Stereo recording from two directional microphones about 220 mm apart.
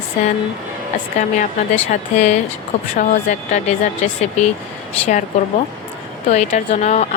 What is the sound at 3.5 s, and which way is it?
Speech, 35° left (ahead or behind).